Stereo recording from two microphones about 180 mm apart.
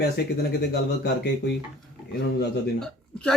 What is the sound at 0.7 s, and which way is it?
Speech, 65° left (ahead or behind).